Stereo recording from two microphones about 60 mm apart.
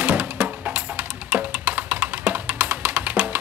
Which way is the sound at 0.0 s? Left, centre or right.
Right.